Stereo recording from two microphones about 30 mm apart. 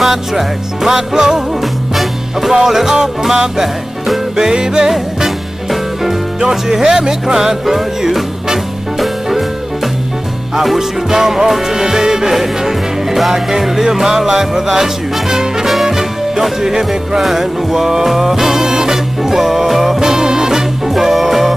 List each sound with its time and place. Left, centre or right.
0.0 s music: centre
1.6 s music: centre
2.5 s music: centre
4.4 s speech: right
6.4 s speech: centre
7.3 s music: centre
10.5 s music: centre
12.3 s music: centre
16.6 s speech: centre
17.2 s music: centre
20.0 s music: centre
20.9 s music: centre